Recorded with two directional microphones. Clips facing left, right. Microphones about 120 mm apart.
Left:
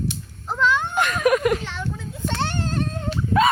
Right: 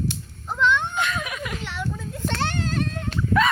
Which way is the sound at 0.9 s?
50° left (ahead or behind).